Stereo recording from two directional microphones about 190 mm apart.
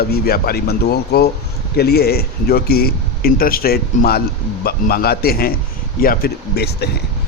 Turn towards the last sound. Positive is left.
turn(degrees=60)  # may be behind; listen again after turning